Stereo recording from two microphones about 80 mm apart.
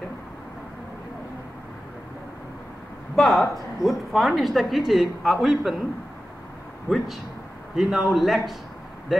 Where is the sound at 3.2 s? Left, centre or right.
Centre.